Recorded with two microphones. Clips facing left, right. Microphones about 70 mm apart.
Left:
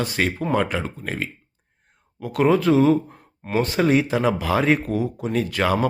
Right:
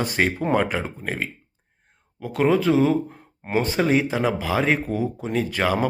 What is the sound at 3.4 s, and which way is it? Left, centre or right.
Speech, right.